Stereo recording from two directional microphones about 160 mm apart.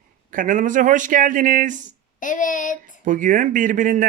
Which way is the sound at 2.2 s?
55° left (ahead or behind).